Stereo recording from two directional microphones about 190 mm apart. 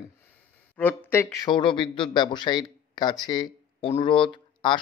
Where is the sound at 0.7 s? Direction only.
10° left (ahead or behind).